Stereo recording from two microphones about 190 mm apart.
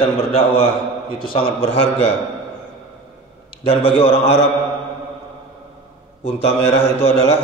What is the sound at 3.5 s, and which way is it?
Speech, 30° left (ahead or behind).